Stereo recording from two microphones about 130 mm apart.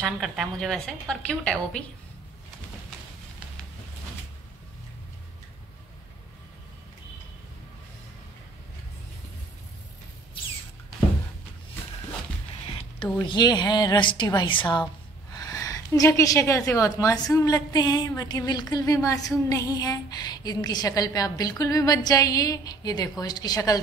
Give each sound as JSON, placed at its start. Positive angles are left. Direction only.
{"t": 0.0, "sound": "a woman's voice", "side_deg": -5}
{"t": 12.7, "sound": "a woman's voice", "side_deg": 40}